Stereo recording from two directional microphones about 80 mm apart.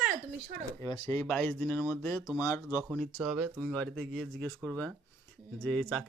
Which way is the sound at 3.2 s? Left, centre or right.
Centre.